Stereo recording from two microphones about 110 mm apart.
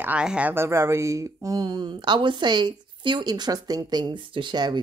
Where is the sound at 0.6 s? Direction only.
25° right (ahead or behind).